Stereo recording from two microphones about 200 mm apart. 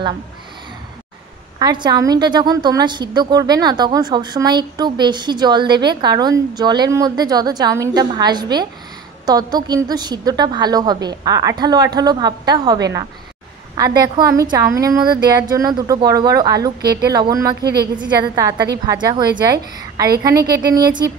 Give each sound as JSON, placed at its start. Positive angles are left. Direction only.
{"t": 1.6, "sound": "a woman's voice", "side_deg": -20}
{"t": 16.8, "sound": "a woman's voice", "side_deg": -50}
{"t": 17.1, "sound": "a woman's voice", "side_deg": -20}
{"t": 17.6, "sound": "a woman's voice", "side_deg": -55}
{"t": 17.9, "sound": "a woman's voice", "side_deg": -20}